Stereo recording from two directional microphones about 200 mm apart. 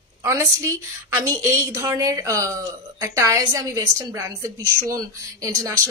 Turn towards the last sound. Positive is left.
turn(degrees=-15)  # may be behind; listen again after turning